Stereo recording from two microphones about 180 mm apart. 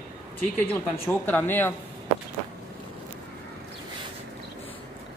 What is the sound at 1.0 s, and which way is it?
Speech, 10° left (ahead or behind).